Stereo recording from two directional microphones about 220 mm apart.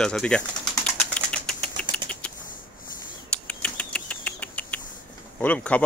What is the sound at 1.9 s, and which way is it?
Typing, 5° left (ahead or behind).